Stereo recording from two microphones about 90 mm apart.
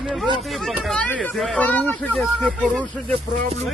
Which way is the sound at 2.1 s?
5° left (ahead or behind).